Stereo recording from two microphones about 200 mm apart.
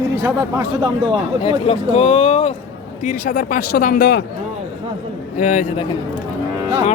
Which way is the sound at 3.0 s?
40° left (ahead or behind).